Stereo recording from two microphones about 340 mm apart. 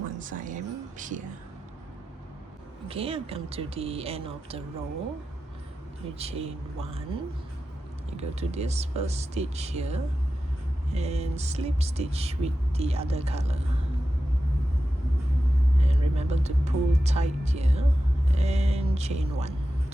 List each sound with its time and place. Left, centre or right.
0.2 s a sound: right
2.9 s speech: centre
6.1 s speech: centre
8.1 s speech: centre
15.8 s speech: centre